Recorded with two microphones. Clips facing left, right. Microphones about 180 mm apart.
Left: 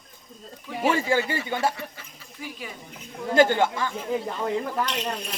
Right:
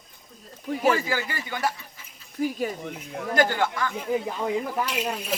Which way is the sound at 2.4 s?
45° right (ahead or behind).